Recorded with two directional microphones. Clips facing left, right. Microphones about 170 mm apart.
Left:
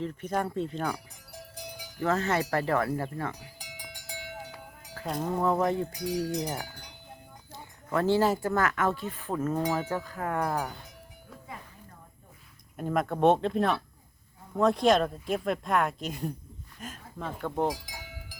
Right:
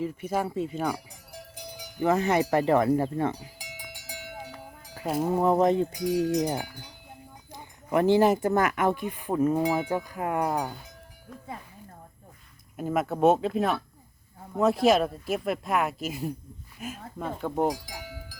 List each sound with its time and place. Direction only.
0.0 s speech: 10° right (ahead or behind)
2.0 s cowbell: 15° right (ahead or behind)
3.6 s cowbell: 5° right (ahead or behind)
7.5 s speech: 15° right (ahead or behind)
12.7 s speech: 5° right (ahead or behind)